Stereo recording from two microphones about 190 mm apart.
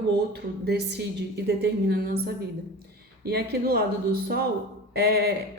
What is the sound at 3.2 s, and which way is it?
A woman's voice, 55° right (ahead or behind).